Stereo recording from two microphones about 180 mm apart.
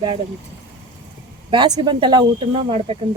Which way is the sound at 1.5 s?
25° right (ahead or behind).